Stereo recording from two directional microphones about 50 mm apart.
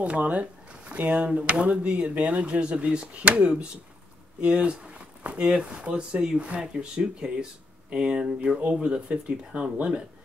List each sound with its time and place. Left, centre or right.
0.0 s speech: right